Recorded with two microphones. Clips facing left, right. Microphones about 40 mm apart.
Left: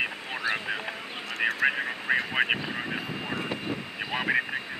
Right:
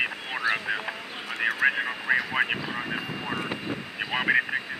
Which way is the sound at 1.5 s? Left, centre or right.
Centre.